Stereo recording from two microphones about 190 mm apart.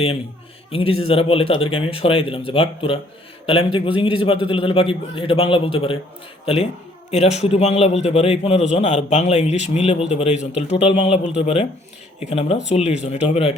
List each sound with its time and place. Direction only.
0.7 s a man's voice: 30° left (ahead or behind)